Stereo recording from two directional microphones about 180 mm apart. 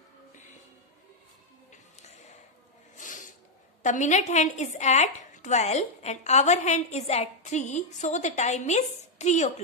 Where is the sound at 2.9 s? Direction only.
45° left (ahead or behind).